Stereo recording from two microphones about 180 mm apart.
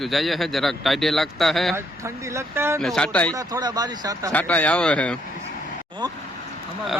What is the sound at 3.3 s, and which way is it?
Speech, 20° right (ahead or behind).